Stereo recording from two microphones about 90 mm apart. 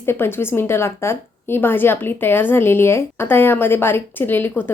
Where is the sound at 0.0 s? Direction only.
25° left (ahead or behind).